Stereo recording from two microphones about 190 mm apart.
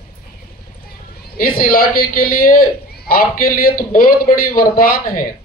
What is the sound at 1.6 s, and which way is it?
A man's voice, 50° left (ahead or behind).